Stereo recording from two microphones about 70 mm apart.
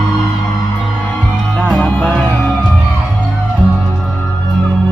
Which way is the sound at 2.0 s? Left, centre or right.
Centre.